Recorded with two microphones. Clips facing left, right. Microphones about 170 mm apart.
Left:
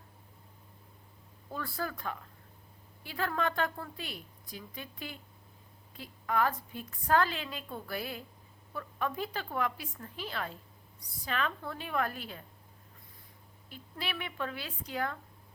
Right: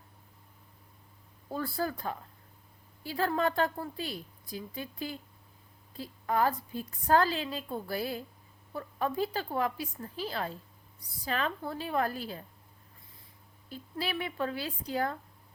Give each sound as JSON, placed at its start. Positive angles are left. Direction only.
{"t": 1.5, "sound": "a woman's voice", "side_deg": -35}
{"t": 13.7, "sound": "a woman's voice", "side_deg": -35}